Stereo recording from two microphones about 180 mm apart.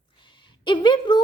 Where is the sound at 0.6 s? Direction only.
25° left (ahead or behind).